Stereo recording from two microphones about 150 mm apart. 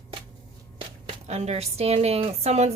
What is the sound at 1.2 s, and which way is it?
Speech, 45° right (ahead or behind).